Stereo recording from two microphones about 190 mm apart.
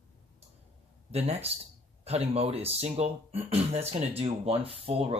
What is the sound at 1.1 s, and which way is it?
Speech, 35° right (ahead or behind).